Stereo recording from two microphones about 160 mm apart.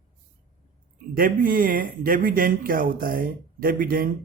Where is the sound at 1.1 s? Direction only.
65° right (ahead or behind).